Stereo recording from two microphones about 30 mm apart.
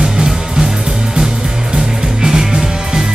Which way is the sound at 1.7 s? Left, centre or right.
Right.